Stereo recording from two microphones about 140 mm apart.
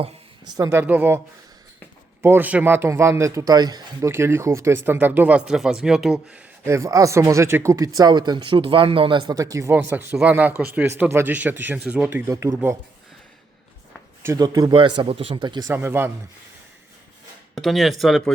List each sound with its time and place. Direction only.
0.0 s speech: 30° right (ahead or behind); by 1.2 s 15° right (ahead or behind)
2.2 s a man's voice: 15° right (ahead or behind)
6.7 s speech: 20° right (ahead or behind); by 9.2 s 35° right (ahead or behind)
9.2 s a man's voice: 25° right (ahead or behind)
14.2 s speech: 20° right (ahead or behind)
14.8 s speech: 35° right (ahead or behind)
15.7 s a man's voice: 15° right (ahead or behind)
17.5 s speech: centre (ahead or behind)